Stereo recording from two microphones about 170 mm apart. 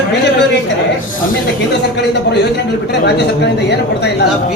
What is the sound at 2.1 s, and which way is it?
A man's voice, 80° left.